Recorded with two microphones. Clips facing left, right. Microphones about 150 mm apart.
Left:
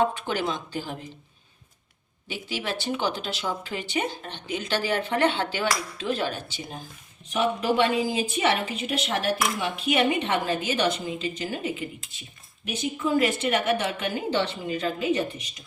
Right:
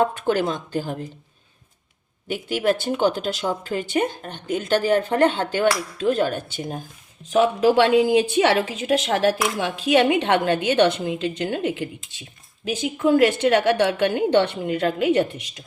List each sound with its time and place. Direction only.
0.0 s speech: 50° right (ahead or behind)
2.2 s speech: 50° right (ahead or behind)
7.3 s speech: 90° right; by 15.4 s 65° right (ahead or behind)